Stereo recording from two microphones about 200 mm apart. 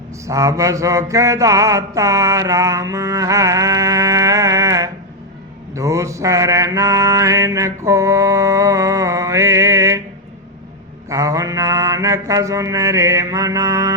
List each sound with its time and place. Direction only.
0.3 s mantra: 15° right (ahead or behind)
11.1 s mantra: 15° right (ahead or behind)